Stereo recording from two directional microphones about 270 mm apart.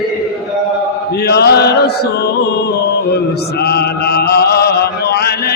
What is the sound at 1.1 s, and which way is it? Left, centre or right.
Music, left.